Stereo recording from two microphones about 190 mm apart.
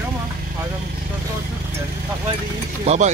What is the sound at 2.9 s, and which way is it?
Speech, 35° right (ahead or behind).